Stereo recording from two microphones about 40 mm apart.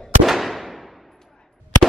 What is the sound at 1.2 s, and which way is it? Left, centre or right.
Gunshot, centre.